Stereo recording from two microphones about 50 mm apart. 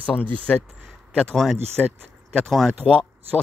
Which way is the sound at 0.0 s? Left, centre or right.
Left.